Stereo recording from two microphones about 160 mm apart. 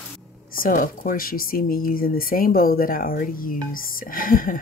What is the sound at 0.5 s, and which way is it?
Speech, 60° left (ahead or behind).